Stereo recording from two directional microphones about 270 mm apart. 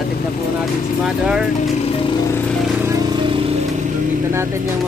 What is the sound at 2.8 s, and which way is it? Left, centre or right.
Vehicle, centre.